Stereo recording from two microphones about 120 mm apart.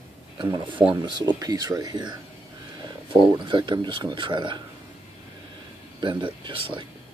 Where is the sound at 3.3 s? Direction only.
40° right (ahead or behind).